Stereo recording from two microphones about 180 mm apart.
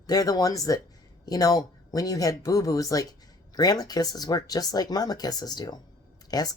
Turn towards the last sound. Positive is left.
turn(degrees=20)  # may be behind; listen again after turning